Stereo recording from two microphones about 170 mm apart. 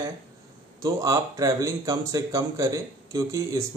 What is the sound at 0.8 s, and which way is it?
Speech, 20° right (ahead or behind).